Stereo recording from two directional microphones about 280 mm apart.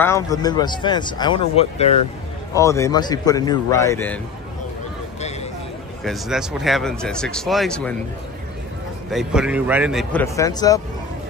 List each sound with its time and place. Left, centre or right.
0.0 s speech: centre
2.5 s speech: centre
6.0 s speech: centre
9.1 s speech: centre
10.2 s speech: centre